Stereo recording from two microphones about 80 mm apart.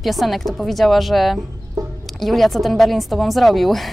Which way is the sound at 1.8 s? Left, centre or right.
Right.